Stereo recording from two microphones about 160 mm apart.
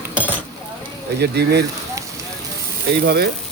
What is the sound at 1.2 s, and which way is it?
Speech, 90° right.